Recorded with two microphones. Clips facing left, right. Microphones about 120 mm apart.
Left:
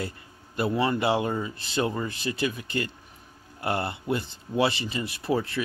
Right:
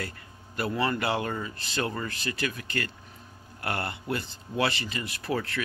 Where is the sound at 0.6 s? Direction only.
20° left (ahead or behind).